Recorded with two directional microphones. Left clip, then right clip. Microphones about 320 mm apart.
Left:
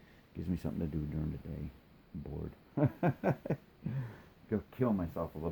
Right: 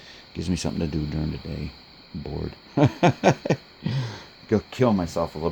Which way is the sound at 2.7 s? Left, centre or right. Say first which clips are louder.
Right 13 dB; right.